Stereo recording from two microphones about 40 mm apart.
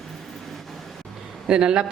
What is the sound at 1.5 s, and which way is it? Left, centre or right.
Speech, right.